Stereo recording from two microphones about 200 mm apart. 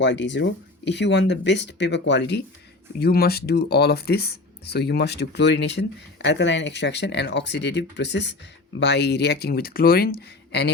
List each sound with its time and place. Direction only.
0.0 s speech: 65° left (ahead or behind)